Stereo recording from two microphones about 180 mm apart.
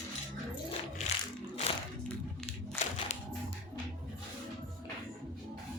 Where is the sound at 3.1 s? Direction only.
40° left (ahead or behind).